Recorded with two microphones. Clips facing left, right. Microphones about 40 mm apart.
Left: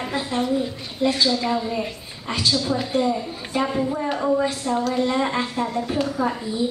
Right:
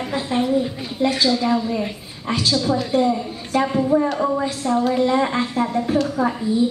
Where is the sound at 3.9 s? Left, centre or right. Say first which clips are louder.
Right 4 dB; right.